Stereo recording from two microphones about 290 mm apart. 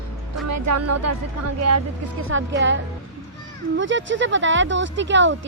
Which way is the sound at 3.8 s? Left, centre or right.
Right.